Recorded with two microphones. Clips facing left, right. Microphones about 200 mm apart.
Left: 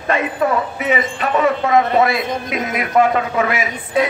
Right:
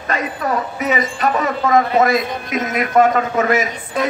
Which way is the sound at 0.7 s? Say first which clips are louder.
Even; 40° right (ahead or behind).